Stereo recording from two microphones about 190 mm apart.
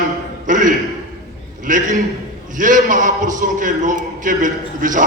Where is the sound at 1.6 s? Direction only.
45° right (ahead or behind).